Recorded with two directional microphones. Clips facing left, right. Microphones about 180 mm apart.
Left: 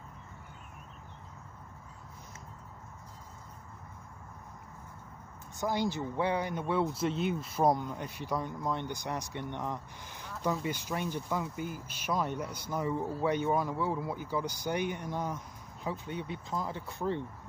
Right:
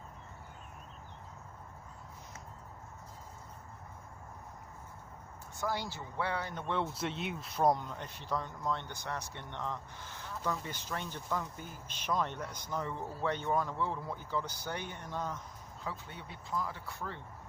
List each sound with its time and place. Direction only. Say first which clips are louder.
5.5 s speech: left 6 dB; 20° left (ahead or behind)